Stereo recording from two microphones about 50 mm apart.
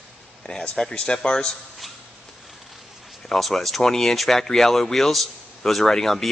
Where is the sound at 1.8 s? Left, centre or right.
Centre.